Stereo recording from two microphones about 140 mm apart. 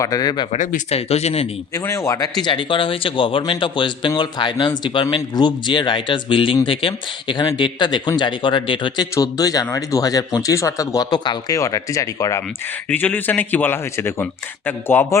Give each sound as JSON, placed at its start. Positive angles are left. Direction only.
{"t": 0.0, "sound": "a man's voice", "side_deg": 25}
{"t": 0.5, "sound": "speech", "side_deg": 60}
{"t": 0.9, "sound": "speech", "side_deg": 45}
{"t": 1.7, "sound": "a man's voice", "side_deg": 20}
{"t": 2.4, "sound": "speech", "side_deg": 35}
{"t": 9.1, "sound": "a man's voice", "side_deg": 25}
{"t": 12.9, "sound": "a man's voice", "side_deg": 10}